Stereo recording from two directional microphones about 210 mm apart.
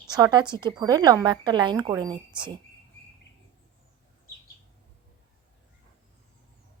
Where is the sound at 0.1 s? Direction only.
20° right (ahead or behind).